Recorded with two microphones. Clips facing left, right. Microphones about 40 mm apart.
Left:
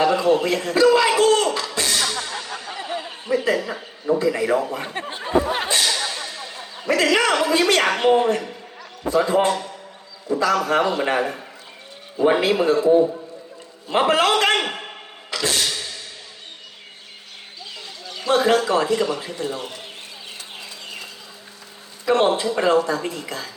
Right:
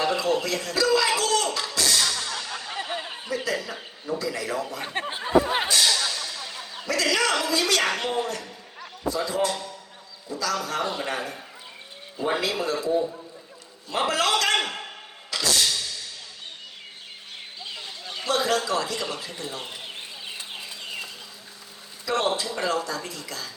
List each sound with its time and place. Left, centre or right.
0.0 s a man's voice: left
1.7 s music: left
3.2 s a woman's voice: left
5.0 s speech: centre
5.6 s a sound: left
6.8 s a woman's voice: left
15.3 s music: left
17.7 s a sound: right
18.3 s a woman's voice: left
22.0 s a woman's voice: left